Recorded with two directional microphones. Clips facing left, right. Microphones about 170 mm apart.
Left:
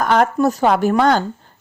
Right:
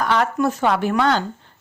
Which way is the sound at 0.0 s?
45° left (ahead or behind).